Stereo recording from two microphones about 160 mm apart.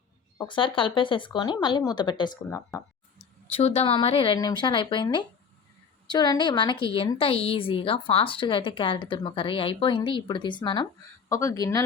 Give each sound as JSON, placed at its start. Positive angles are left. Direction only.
{"t": 0.3, "sound": "speech", "side_deg": 30}
{"t": 3.2, "sound": "speech", "side_deg": 40}
{"t": 4.4, "sound": "a woman's voice", "side_deg": 25}